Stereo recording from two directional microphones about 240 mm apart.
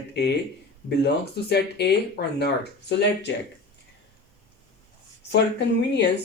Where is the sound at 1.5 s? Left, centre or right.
Left.